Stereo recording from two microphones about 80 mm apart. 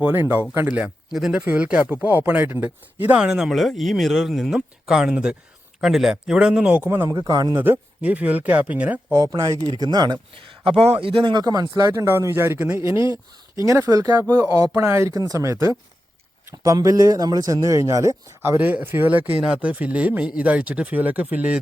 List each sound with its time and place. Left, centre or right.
0.0 s speech: right
1.1 s speech: centre
1.4 s speech: centre
3.2 s speech: centre
6.8 s speech: right
7.1 s a man's voice: right
7.5 s speech: right
8.0 s speech: centre
9.7 s speech: right
11.9 s a man's voice: right
14.3 s a man's voice: right
16.7 s a man's voice: right
18.5 s speech: right